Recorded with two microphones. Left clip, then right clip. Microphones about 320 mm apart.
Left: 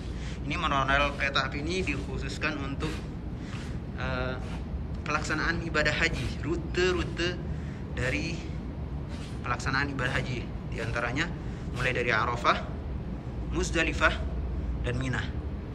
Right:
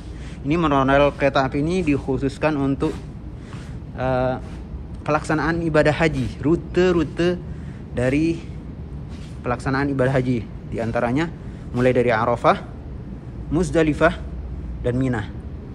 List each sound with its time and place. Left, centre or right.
0.5 s speech: centre
4.0 s speech: centre
9.4 s speech: centre